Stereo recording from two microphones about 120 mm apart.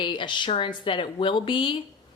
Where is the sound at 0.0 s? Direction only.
40° left (ahead or behind).